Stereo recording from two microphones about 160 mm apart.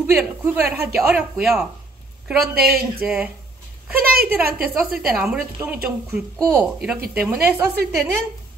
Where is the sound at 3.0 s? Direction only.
5° right (ahead or behind).